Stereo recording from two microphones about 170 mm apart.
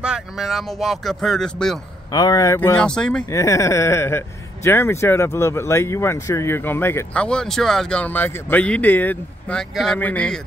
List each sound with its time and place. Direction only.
0.0 s speech: 5° right (ahead or behind)
2.0 s speech: 25° left (ahead or behind)
2.8 s speech: 5° left (ahead or behind)
3.3 s speech: 15° left (ahead or behind)